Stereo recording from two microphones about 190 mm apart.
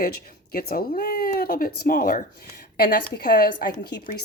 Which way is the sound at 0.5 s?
50° left (ahead or behind).